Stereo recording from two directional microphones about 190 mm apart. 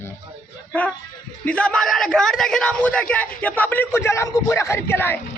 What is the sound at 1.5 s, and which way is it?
Speech, 5° left (ahead or behind).